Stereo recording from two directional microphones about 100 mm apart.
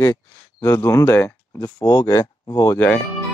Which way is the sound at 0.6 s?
30° left (ahead or behind).